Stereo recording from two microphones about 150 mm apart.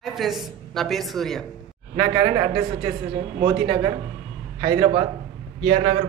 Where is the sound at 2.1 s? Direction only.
30° right (ahead or behind).